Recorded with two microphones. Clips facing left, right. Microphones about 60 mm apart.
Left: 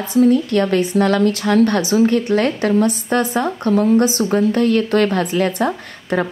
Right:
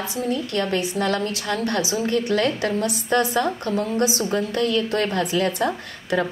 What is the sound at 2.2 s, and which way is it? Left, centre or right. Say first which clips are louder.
A woman's voice: left 5 dB; left.